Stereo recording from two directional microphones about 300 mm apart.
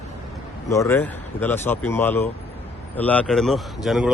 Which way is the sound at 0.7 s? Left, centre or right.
Centre.